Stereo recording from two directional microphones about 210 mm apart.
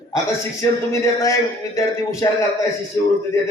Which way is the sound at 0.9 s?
15° left (ahead or behind).